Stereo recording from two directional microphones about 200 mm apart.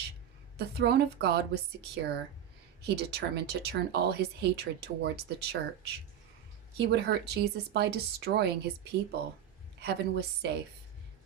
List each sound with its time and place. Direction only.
0.5 s speech: 55° right (ahead or behind)